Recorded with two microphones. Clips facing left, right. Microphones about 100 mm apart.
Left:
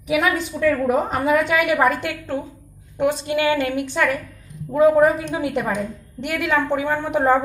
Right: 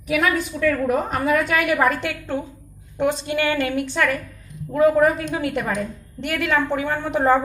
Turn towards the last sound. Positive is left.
turn(degrees=10)  # may be behind; listen again after turning